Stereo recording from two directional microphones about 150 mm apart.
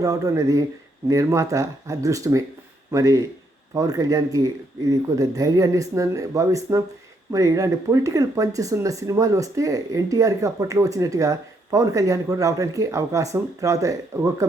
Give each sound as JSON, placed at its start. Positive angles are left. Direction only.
{"t": 0.0, "sound": "speech", "side_deg": -25}